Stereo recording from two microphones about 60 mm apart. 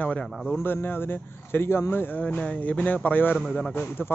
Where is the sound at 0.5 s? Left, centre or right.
Left.